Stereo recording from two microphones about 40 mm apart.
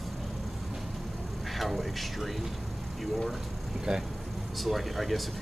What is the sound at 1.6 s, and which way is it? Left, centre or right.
Speech, centre.